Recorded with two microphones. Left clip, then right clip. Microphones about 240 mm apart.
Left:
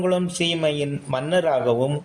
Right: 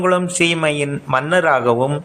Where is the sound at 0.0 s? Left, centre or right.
Centre.